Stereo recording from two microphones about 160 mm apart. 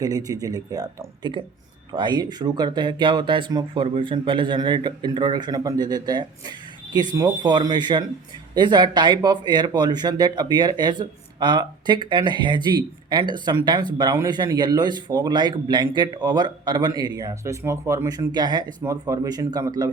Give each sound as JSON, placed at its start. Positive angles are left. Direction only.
{"t": 0.0, "sound": "speech", "side_deg": -25}